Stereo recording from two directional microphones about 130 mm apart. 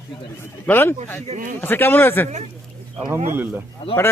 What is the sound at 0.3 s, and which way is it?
A man's voice, 15° left (ahead or behind).